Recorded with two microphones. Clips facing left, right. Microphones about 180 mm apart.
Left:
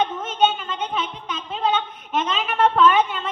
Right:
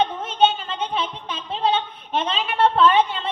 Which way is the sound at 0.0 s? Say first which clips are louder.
Right 1 dB; 30° right (ahead or behind).